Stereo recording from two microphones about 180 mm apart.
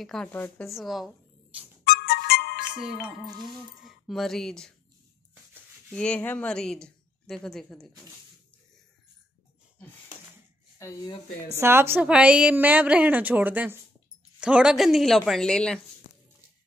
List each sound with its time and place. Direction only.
0.0 s a woman's voice: 5° left (ahead or behind)
1.9 s music: 60° left (ahead or behind)
3.4 s a woman's voice: centre (ahead or behind)
11.5 s a woman's voice: 15° right (ahead or behind); by 15.8 s 5° left (ahead or behind)